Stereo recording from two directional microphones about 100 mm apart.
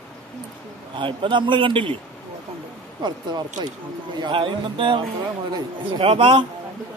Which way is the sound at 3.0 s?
50° right (ahead or behind).